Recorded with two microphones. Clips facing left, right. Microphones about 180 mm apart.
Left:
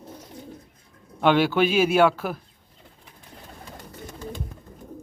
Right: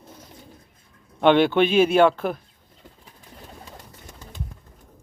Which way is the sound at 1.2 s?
5° left (ahead or behind).